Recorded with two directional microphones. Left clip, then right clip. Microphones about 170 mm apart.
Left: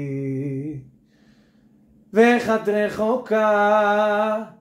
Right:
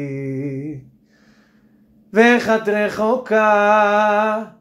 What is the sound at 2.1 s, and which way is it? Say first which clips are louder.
Speech: right 3 dB; 20° right (ahead or behind).